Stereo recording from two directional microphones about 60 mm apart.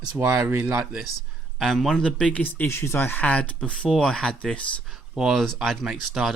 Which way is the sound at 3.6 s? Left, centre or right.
Centre.